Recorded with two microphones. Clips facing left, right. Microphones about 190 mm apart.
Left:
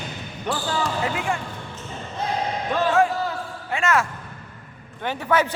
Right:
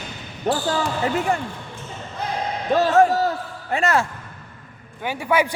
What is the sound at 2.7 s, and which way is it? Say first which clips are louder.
A man's voice: right 5 dB; 40° right (ahead or behind).